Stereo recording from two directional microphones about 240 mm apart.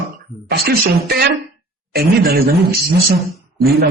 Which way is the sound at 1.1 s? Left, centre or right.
Right.